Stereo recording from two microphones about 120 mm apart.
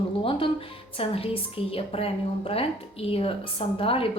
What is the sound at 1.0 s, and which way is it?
A woman's voice, 50° left (ahead or behind).